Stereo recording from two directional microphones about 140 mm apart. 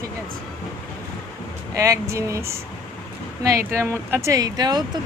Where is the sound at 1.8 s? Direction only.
25° right (ahead or behind).